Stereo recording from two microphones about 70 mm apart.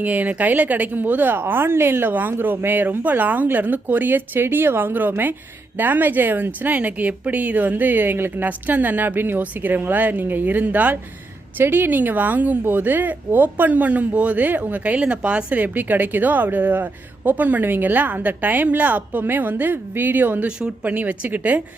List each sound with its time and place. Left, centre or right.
0.0 s speech: right
20.6 s speech: centre
20.9 s speech: right